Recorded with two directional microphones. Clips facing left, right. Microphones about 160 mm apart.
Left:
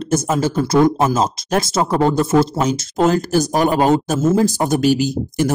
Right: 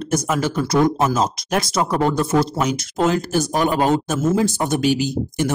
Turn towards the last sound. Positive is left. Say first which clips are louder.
# left 3 dB
turn(degrees=40)  # may be behind; listen again after turning